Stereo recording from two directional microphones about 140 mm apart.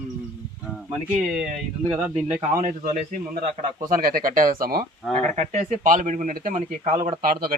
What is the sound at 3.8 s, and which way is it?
Speech, 90° right.